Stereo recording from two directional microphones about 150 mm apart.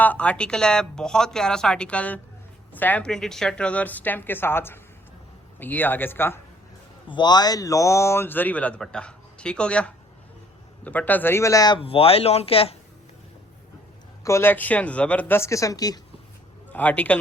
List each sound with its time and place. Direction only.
0.0 s a man's voice: 10° left (ahead or behind)
7.1 s a man's voice: 30° left (ahead or behind)
11.8 s speech: 40° left (ahead or behind)
14.3 s a man's voice: 15° left (ahead or behind)
16.6 s speech: 10° left (ahead or behind)